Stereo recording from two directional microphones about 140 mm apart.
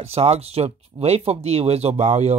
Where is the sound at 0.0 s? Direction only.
45° right (ahead or behind).